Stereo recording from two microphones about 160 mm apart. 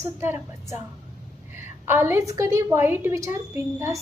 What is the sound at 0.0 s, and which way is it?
A woman's voice, 15° right (ahead or behind).